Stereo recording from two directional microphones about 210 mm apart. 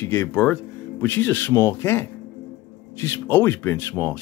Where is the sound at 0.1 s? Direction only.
10° left (ahead or behind).